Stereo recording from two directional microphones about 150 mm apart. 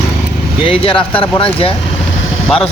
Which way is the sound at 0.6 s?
35° left (ahead or behind).